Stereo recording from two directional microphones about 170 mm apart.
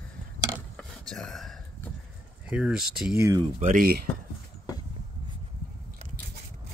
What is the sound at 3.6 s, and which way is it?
Speech, 55° right (ahead or behind).